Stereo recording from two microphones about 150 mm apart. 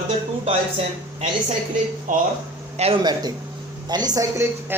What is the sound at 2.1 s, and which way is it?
Speech, 60° right (ahead or behind).